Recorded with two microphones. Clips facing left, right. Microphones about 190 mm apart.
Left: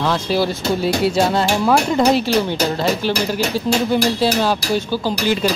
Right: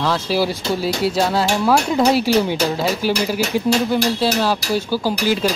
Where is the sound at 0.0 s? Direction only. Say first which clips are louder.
Left 1 dB; 5° right (ahead or behind).